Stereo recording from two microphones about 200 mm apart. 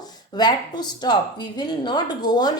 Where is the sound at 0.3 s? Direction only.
20° left (ahead or behind).